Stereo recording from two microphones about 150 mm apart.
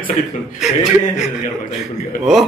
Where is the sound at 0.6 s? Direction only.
5° right (ahead or behind).